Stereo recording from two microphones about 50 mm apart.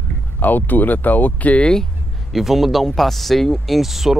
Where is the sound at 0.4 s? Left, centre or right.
Left.